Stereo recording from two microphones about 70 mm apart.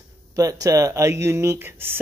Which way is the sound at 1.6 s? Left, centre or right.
Right.